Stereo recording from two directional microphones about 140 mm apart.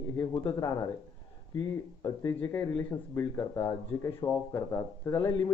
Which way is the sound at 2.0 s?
25° left (ahead or behind).